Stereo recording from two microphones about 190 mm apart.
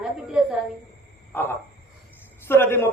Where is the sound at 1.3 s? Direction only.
10° left (ahead or behind).